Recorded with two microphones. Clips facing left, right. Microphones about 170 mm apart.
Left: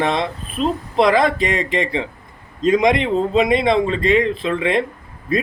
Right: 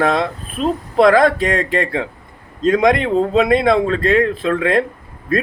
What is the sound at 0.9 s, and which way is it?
Speech, 50° right (ahead or behind).